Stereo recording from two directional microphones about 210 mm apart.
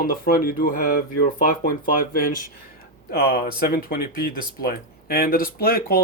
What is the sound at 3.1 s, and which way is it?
Speech, 45° left (ahead or behind).